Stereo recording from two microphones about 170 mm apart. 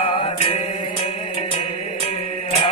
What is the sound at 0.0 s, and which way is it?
Music, 40° left (ahead or behind).